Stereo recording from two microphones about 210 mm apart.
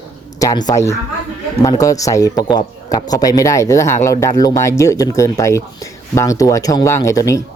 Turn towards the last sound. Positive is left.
turn(degrees=15)  # may be behind; listen again after turning